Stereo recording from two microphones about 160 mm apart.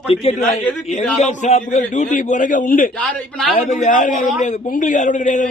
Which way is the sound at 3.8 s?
50° left (ahead or behind).